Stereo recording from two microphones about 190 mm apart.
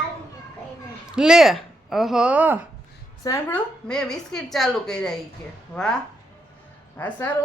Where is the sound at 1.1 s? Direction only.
5° right (ahead or behind).